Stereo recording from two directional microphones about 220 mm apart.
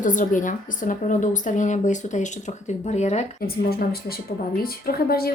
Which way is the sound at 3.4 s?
45° left (ahead or behind).